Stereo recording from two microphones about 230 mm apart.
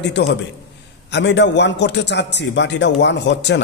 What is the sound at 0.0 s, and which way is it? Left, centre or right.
A man's voice, left.